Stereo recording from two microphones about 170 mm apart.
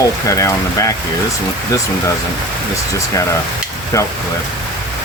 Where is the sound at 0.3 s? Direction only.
20° left (ahead or behind).